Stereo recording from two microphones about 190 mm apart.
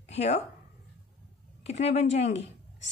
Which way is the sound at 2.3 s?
75° left (ahead or behind).